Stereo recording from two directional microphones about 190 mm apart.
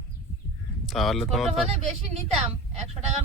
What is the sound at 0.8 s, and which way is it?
Speech, centre (ahead or behind).